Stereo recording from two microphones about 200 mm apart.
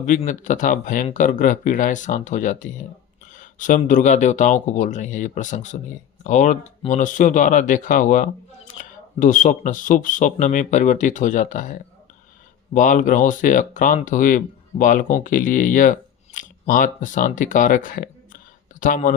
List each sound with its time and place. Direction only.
0.2 s speech: 40° left (ahead or behind)